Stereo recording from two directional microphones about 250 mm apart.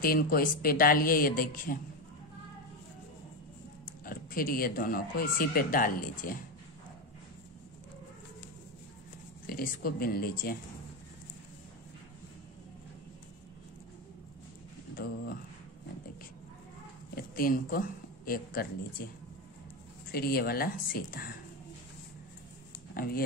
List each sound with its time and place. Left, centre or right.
0.0 s speech: left
4.0 s speech: left
9.5 s speech: left
15.0 s speech: left
17.1 s speech: left
20.1 s speech: left
22.9 s speech: left